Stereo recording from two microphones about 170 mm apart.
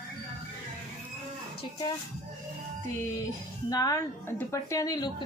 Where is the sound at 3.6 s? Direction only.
20° left (ahead or behind).